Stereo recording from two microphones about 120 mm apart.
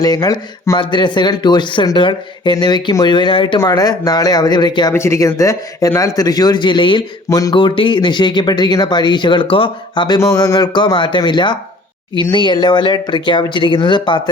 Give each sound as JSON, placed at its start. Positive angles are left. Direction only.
{"t": 0.0, "sound": "speech", "side_deg": 35}
{"t": 0.8, "sound": "speech", "side_deg": 40}
{"t": 3.7, "sound": "speech", "side_deg": 30}
{"t": 4.9, "sound": "speech", "side_deg": 25}
{"t": 7.3, "sound": "speech", "side_deg": 30}
{"t": 7.5, "sound": "speech", "side_deg": 45}
{"t": 10.2, "sound": "speech", "side_deg": 30}